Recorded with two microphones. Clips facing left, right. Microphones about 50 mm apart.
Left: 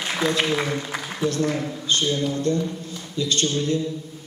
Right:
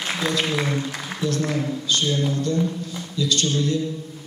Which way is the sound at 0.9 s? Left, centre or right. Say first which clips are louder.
Left 1 dB; left.